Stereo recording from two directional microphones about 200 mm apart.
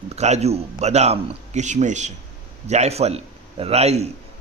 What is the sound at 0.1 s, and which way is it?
A man's voice, 35° right (ahead or behind).